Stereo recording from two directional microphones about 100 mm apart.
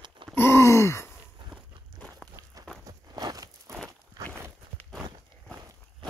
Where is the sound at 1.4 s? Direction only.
50° right (ahead or behind).